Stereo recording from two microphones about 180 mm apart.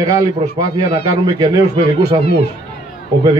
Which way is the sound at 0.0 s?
20° right (ahead or behind).